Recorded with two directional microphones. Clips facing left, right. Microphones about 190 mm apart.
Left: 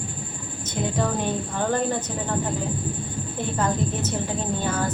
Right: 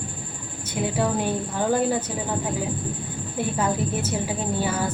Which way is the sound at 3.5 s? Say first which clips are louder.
Left 1 dB; 10° right (ahead or behind).